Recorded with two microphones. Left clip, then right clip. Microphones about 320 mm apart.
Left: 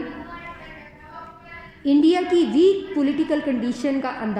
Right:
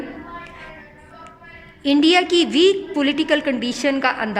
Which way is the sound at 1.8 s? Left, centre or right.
Right.